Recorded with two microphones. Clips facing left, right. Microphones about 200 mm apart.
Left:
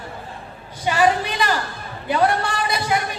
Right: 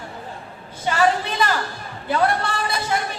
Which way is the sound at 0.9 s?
15° left (ahead or behind).